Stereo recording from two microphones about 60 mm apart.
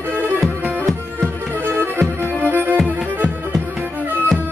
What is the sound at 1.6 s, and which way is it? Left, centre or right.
Music, right.